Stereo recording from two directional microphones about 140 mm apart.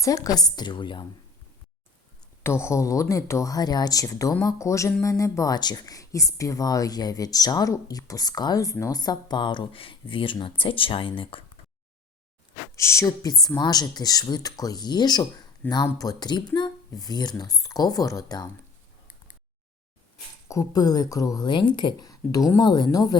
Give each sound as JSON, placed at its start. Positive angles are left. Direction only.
{"t": 0.0, "sound": "speech", "side_deg": 25}
{"t": 2.4, "sound": "speech", "side_deg": 20}
{"t": 12.7, "sound": "speech", "side_deg": 20}
{"t": 20.5, "sound": "speech", "side_deg": 25}